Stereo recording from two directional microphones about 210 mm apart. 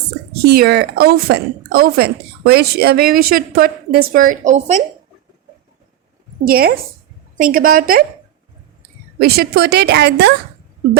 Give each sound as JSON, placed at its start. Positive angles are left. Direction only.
{"t": 0.4, "sound": "a woman's voice", "side_deg": -50}
{"t": 6.4, "sound": "a woman's voice", "side_deg": -45}
{"t": 9.2, "sound": "a woman's voice", "side_deg": -50}